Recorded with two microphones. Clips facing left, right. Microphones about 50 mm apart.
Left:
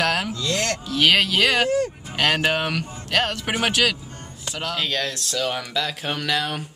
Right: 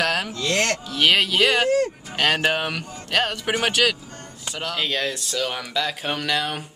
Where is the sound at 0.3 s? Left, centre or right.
Right.